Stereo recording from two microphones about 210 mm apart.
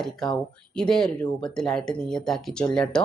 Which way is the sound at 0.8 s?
5° left (ahead or behind).